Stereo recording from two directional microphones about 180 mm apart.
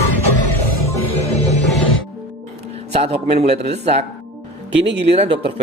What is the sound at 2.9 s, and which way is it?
Speech, 35° right (ahead or behind).